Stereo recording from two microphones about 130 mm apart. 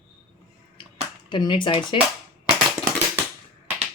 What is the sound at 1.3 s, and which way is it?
Speech, 35° left (ahead or behind).